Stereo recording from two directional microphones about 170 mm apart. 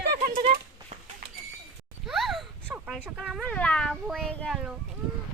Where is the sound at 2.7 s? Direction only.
10° right (ahead or behind).